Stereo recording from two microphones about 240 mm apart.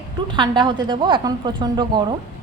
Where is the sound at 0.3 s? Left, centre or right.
Centre.